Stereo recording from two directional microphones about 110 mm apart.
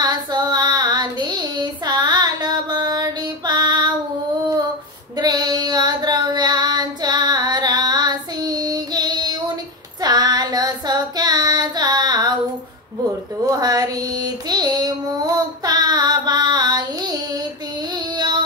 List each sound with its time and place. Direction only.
0.0 s child singing: 40° right (ahead or behind)
5.1 s female singing: 40° right (ahead or behind)
10.0 s child singing: 40° right (ahead or behind)
13.5 s child singing: 35° right (ahead or behind)
17.9 s female singing: 40° right (ahead or behind)